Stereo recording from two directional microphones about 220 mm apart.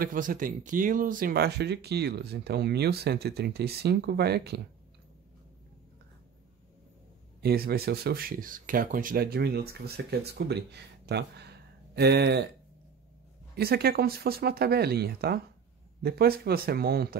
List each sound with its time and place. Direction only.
0.0 s speech: 40° right (ahead or behind)
7.4 s speech: 45° right (ahead or behind)
13.6 s speech: 45° right (ahead or behind)